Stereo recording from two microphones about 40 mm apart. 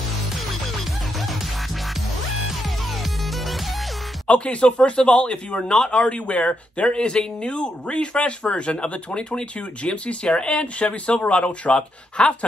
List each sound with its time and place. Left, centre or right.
4.3 s speech: left